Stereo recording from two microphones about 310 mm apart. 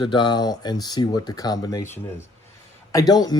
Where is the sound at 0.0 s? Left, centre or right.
Centre.